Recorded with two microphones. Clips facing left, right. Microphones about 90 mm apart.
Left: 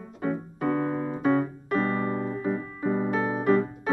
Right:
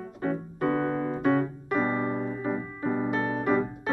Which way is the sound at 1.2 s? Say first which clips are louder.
Left 1 dB; centre (ahead or behind).